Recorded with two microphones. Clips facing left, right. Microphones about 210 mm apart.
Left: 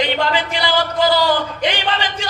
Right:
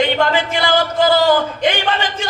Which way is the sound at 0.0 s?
45° right (ahead or behind).